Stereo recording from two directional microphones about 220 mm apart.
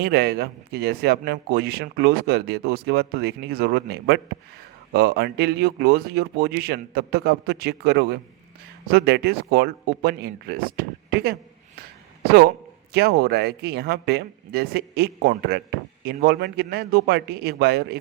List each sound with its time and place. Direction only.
0.0 s a man's voice: 45° right (ahead or behind)